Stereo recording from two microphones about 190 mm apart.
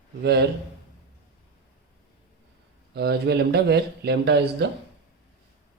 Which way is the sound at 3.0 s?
60° right (ahead or behind).